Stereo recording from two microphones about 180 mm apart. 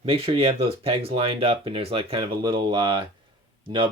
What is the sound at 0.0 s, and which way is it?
Speech, 30° right (ahead or behind).